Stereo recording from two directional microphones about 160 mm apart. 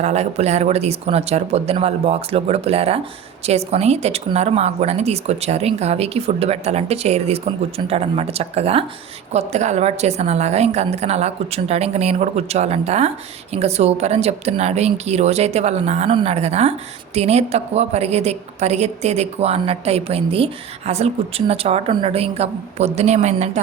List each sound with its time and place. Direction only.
0.0 s a woman's voice: 45° right (ahead or behind)